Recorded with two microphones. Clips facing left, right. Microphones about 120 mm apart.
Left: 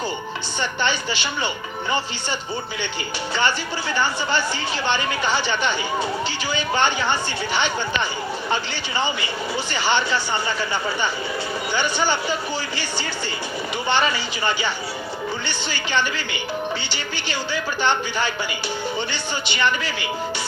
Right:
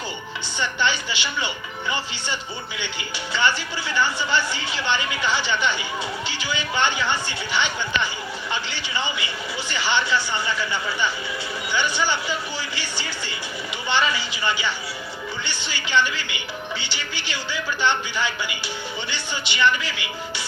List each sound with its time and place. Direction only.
0.8 s speech: 45° left (ahead or behind)
3.3 s speech: 40° left (ahead or behind)
9.7 s speech: 45° left (ahead or behind)
11.7 s speech: 45° left (ahead or behind)
13.8 s speech: 45° left (ahead or behind)
19.5 s speech: 45° left (ahead or behind)